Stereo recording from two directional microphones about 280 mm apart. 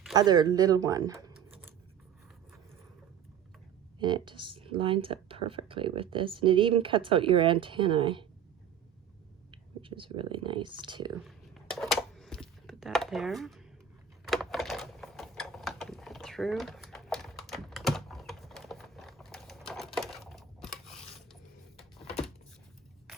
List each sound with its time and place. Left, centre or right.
0.1 s speech: centre
3.9 s speech: centre
9.5 s speech: centre
11.2 s a sound: centre
14.3 s typewriter: centre